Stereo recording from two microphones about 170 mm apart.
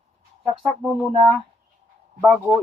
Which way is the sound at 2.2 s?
Centre (ahead or behind).